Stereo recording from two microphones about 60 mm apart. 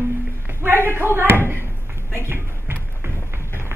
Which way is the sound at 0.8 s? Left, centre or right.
Right.